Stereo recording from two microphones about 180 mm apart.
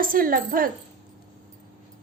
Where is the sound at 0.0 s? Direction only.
50° right (ahead or behind).